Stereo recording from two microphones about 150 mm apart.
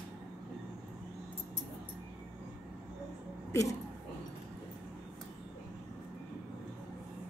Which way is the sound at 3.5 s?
20° left (ahead or behind).